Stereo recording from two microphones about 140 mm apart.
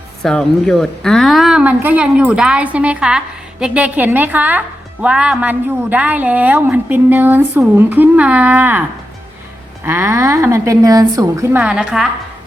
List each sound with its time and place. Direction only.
0.2 s a woman's voice: 5° left (ahead or behind); by 8.8 s 15° right (ahead or behind)
9.8 s a woman's voice: 15° right (ahead or behind)
11.5 s a woman's voice: 10° right (ahead or behind)